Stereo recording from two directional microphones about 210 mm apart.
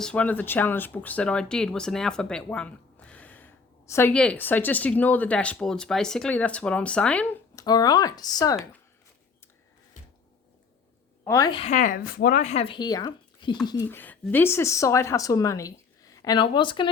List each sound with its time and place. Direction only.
0.0 s speech: 5° left (ahead or behind)
11.3 s speech: 15° left (ahead or behind)